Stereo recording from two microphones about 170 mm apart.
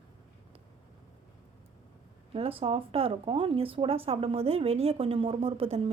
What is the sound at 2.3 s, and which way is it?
Speech, 35° right (ahead or behind).